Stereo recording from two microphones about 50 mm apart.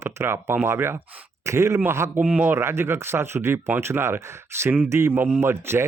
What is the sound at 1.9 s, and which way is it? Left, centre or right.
Speech, right.